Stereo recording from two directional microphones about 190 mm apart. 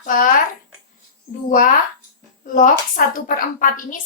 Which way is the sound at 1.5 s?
45° left (ahead or behind).